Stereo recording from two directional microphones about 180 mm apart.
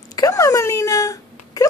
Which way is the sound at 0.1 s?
20° left (ahead or behind).